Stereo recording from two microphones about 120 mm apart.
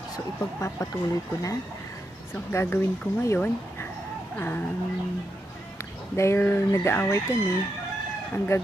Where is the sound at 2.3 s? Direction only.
20° left (ahead or behind).